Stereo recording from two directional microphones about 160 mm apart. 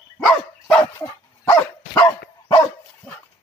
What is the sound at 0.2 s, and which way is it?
Dog, 5° left (ahead or behind).